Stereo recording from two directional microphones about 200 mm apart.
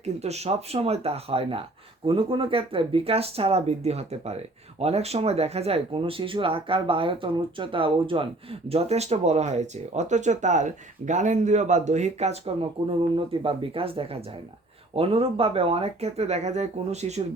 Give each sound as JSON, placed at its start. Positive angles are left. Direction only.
{"t": 0.0, "sound": "speech", "side_deg": -30}